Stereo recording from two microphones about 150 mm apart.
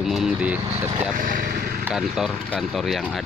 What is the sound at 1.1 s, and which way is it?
Speech, 65° right (ahead or behind).